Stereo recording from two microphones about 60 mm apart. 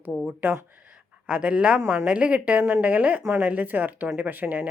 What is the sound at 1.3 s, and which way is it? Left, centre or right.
Speech, centre.